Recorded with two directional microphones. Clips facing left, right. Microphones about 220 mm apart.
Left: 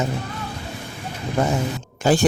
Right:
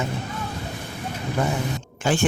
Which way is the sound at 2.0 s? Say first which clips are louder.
Left 5 dB; 40° left (ahead or behind).